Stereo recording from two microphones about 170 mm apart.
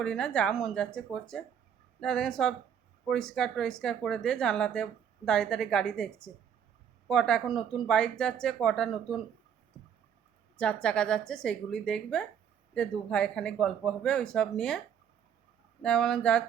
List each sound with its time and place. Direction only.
0.0 s speech: 5° left (ahead or behind)
10.6 s speech: 5° left (ahead or behind)
15.8 s speech: 5° left (ahead or behind)